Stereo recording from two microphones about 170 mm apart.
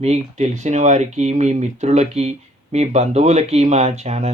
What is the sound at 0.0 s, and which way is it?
Speech, 40° right (ahead or behind).